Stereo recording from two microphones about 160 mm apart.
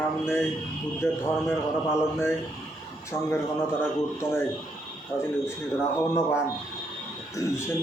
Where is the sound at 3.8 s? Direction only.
15° left (ahead or behind).